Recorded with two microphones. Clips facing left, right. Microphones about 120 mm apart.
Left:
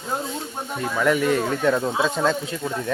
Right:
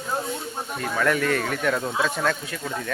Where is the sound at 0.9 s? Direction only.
20° left (ahead or behind).